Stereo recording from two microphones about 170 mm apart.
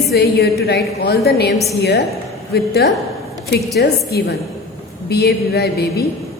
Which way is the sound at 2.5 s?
70° left (ahead or behind).